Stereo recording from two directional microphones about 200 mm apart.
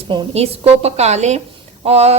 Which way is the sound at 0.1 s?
30° right (ahead or behind).